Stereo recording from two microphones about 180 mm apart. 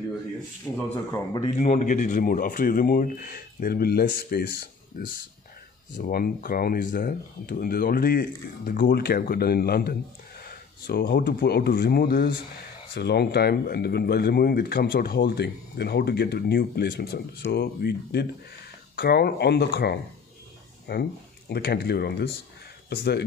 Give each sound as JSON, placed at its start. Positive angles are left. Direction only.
{"t": 1.6, "sound": "speech", "side_deg": 40}